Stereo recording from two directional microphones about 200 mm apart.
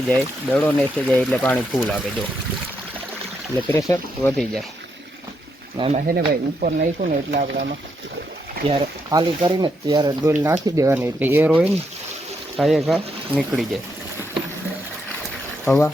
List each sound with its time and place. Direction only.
0.1 s speech: 10° left (ahead or behind)
3.7 s speech: 15° left (ahead or behind)
5.7 s speech: 30° right (ahead or behind)
6.1 s speech: 45° right (ahead or behind)
8.6 s speech: 25° right (ahead or behind); by 13.7 s centre (ahead or behind)